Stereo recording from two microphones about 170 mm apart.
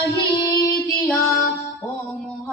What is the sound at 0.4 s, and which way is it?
Music, 20° left (ahead or behind).